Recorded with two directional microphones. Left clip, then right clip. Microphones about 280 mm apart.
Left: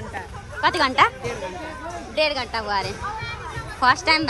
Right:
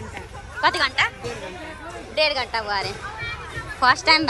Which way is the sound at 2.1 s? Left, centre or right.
Centre.